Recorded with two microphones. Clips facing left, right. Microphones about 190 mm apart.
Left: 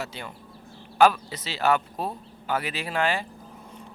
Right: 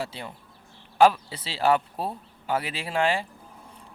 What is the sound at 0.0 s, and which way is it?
Speech, 30° right (ahead or behind).